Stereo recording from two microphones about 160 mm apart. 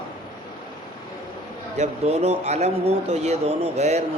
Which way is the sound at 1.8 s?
40° right (ahead or behind).